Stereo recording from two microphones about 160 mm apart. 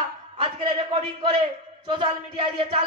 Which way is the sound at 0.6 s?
35° right (ahead or behind).